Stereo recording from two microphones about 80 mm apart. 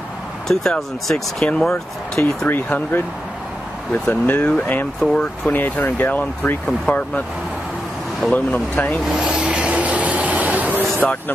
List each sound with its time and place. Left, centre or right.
0.5 s speech: centre
2.1 s speech: left
8.3 s speech: centre
9.0 s vehicle: centre
11.0 s speech: left